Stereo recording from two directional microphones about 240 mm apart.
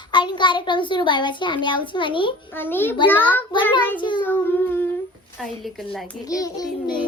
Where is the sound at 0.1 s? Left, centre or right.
Centre.